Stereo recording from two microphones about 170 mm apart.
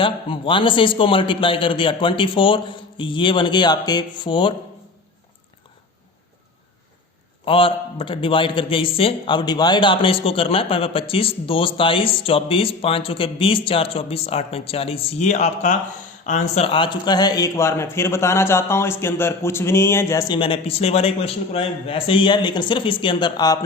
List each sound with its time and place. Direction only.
0.0 s speech: 30° left (ahead or behind)
7.4 s a man's voice: 30° left (ahead or behind)
16.6 s speech: 30° left (ahead or behind)